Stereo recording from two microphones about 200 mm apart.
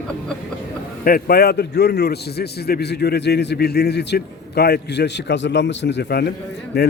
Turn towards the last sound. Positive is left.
turn(degrees=55)  # may be behind; listen again after turning